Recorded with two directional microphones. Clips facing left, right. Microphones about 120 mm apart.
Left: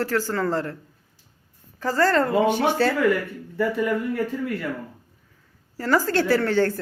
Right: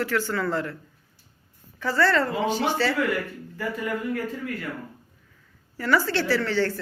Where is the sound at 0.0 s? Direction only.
40° left (ahead or behind).